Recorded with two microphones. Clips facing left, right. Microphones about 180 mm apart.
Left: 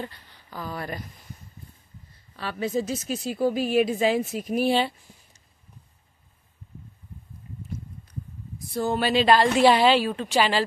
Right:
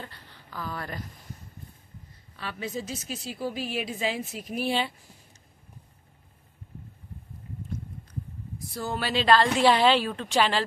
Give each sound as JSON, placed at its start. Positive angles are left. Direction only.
{"t": 0.0, "sound": "speech", "side_deg": 15}
{"t": 2.3, "sound": "a woman's voice", "side_deg": 40}
{"t": 8.7, "sound": "a woman's voice", "side_deg": 20}